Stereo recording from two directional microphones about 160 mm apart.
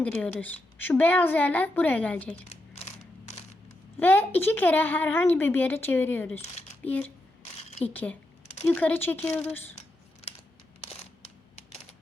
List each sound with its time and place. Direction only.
0.0 s a woman's voice: 10° left (ahead or behind)
2.3 s a sound: 40° left (ahead or behind)
4.0 s a woman's voice: 10° left (ahead or behind)
7.7 s a sound: 45° left (ahead or behind)
7.9 s a woman's voice: 10° left (ahead or behind)
9.7 s scissors: 40° left (ahead or behind)